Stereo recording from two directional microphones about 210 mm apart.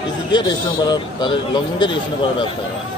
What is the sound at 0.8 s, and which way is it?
A man's voice, 20° left (ahead or behind).